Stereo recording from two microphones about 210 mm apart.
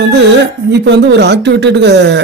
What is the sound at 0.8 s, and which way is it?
A man's voice, 55° right (ahead or behind).